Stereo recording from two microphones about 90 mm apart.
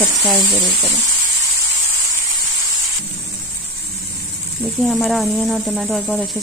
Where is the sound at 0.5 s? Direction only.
15° left (ahead or behind).